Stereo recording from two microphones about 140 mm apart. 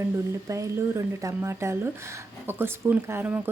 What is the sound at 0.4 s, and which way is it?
A woman's voice, 20° right (ahead or behind).